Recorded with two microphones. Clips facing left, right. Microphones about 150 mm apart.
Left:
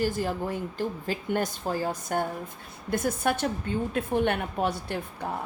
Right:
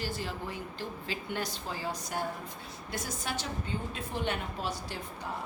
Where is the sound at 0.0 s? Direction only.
50° left (ahead or behind).